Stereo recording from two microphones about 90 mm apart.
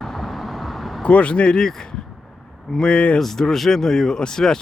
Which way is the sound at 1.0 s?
15° left (ahead or behind).